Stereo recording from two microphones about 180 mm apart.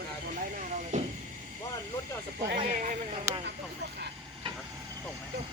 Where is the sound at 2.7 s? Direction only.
45° right (ahead or behind).